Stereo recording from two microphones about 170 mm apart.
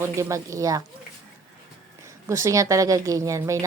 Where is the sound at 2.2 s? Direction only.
15° right (ahead or behind).